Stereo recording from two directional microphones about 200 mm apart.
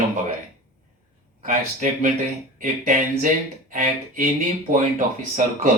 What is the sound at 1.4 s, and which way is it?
Speech, 40° right (ahead or behind).